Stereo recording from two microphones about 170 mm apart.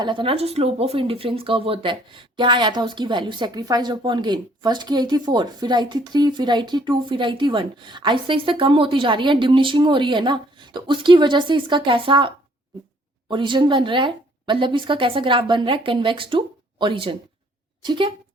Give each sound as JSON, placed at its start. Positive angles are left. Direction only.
{"t": 0.0, "sound": "speech", "side_deg": -30}